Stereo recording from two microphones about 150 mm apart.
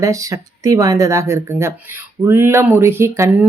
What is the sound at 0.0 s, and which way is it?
Speech, 20° right (ahead or behind).